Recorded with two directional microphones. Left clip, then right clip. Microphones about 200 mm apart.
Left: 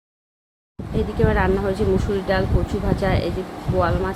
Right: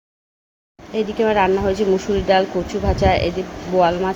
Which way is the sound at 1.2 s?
10° right (ahead or behind).